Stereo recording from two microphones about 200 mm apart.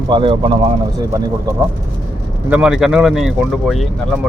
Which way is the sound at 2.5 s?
5° right (ahead or behind).